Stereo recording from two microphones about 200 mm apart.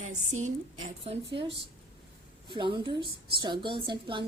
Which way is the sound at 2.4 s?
25° right (ahead or behind).